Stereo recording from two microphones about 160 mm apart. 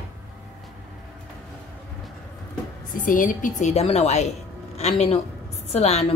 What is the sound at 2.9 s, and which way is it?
Speech, 55° left (ahead or behind).